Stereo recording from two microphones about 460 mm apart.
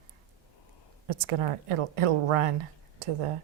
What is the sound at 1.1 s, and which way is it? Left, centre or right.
A woman's voice, right.